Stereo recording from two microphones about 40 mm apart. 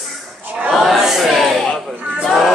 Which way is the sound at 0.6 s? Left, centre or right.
Centre.